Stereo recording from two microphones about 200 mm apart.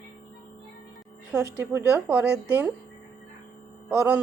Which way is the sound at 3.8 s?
10° right (ahead or behind).